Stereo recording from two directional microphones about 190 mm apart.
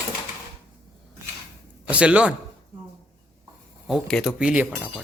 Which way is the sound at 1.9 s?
5° right (ahead or behind).